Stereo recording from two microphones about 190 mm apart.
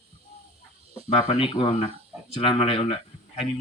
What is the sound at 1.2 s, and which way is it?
Speech, 20° left (ahead or behind).